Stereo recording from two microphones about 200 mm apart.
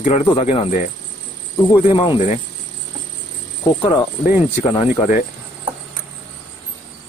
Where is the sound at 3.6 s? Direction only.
25° left (ahead or behind).